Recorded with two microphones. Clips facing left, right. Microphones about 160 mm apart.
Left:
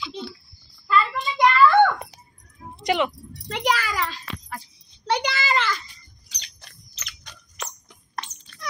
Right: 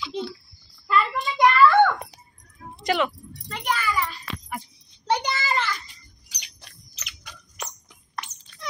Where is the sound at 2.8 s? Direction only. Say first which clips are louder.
Left 1 dB; 20° left (ahead or behind).